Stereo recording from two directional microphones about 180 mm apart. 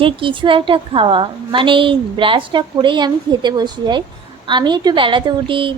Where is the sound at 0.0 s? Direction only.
30° right (ahead or behind).